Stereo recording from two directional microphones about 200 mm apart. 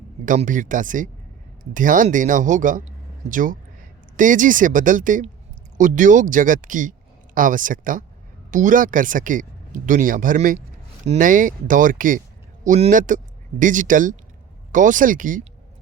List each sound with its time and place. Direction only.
0.3 s speech: 40° right (ahead or behind)